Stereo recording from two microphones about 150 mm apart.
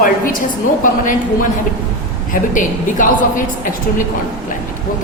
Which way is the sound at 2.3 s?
60° left (ahead or behind).